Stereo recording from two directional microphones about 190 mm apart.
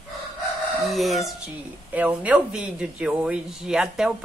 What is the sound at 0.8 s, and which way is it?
A woman's voice, centre (ahead or behind).